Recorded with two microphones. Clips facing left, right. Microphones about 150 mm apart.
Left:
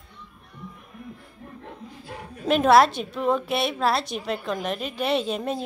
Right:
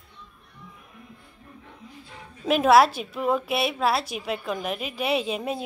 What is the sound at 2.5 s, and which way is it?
A woman's voice, 5° right (ahead or behind).